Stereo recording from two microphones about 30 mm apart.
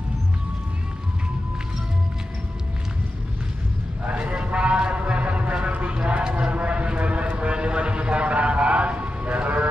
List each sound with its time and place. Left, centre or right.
4.2 s a sound: right
5.9 s clip-clop: right
7.3 s vehicle: right